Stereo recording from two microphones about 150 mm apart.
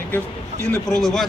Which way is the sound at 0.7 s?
5° left (ahead or behind).